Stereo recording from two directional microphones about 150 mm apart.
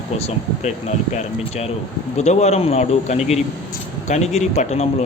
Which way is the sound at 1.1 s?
45° left (ahead or behind).